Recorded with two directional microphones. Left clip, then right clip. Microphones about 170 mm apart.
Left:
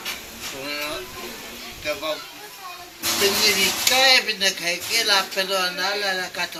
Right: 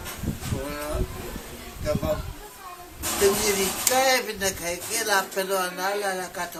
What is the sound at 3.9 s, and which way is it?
Speech, 25° right (ahead or behind).